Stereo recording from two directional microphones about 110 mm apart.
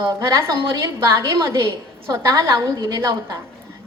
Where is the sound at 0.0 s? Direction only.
25° right (ahead or behind).